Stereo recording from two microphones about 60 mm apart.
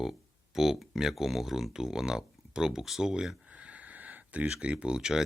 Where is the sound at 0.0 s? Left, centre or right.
Centre.